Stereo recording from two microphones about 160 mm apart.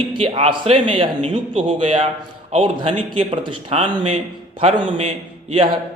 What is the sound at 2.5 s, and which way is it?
A man's voice, 35° right (ahead or behind).